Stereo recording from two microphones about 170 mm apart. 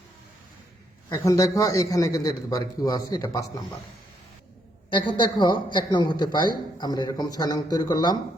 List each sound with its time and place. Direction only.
1.1 s speech: 20° left (ahead or behind)
4.9 s speech: 30° left (ahead or behind)